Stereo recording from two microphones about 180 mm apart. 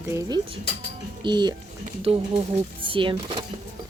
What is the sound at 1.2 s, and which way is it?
Speech, 25° right (ahead or behind).